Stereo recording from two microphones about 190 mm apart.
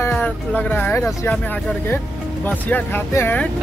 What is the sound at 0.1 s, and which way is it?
Speech, 5° left (ahead or behind).